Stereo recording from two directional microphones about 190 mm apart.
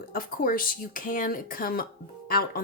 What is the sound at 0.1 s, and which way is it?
Speech, 50° left (ahead or behind).